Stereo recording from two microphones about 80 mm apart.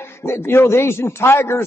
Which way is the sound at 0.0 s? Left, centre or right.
Left.